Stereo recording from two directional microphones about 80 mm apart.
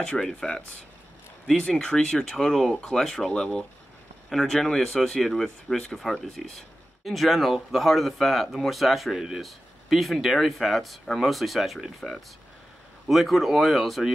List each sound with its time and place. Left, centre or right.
0.0 s speech: centre